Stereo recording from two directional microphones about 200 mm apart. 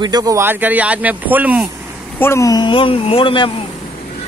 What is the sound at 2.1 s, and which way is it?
A man's voice, 15° left (ahead or behind).